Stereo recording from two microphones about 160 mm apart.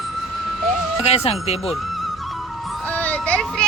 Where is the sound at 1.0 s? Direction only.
40° left (ahead or behind).